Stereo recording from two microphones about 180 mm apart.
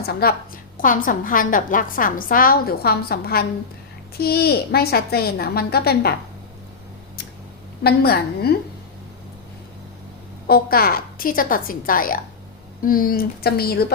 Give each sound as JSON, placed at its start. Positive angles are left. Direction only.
{"t": 0.0, "sound": "a woman's voice", "side_deg": 60}
{"t": 0.8, "sound": "a woman's voice", "side_deg": 50}
{"t": 7.9, "sound": "a woman's voice", "side_deg": 60}
{"t": 10.4, "sound": "a woman's voice", "side_deg": 60}